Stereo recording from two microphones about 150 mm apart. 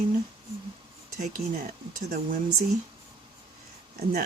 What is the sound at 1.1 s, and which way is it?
Speech, 70° right (ahead or behind).